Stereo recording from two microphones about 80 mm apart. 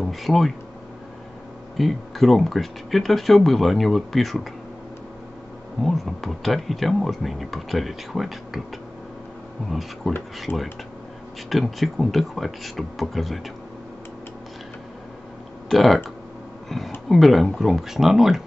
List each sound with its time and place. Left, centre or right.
0.0 s speech: centre
1.8 s speech: centre
5.8 s speech: centre
9.7 s speech: centre
10.5 s speech: left
11.4 s speech: centre
15.7 s speech: centre